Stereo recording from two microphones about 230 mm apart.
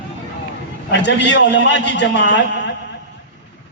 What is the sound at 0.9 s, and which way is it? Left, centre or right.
A man's voice, left.